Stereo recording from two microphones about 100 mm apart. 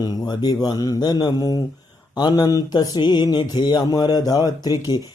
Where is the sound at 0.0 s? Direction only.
40° left (ahead or behind).